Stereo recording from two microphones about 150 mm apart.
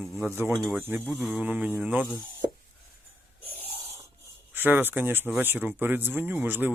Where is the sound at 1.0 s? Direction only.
5° right (ahead or behind).